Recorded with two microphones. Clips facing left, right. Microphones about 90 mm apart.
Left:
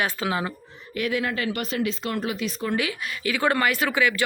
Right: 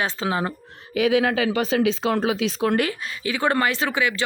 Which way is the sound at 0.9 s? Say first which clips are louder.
Right 7 dB; 90° right.